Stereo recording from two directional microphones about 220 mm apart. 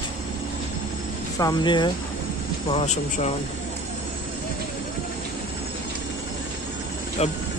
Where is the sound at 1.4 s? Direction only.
20° left (ahead or behind).